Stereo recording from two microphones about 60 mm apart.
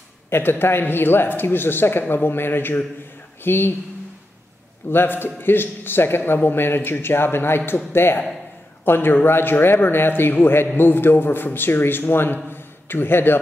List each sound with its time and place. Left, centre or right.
0.3 s a man's voice: left
4.8 s a man's voice: left